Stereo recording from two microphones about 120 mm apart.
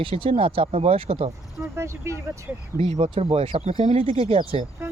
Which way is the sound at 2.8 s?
55° right (ahead or behind).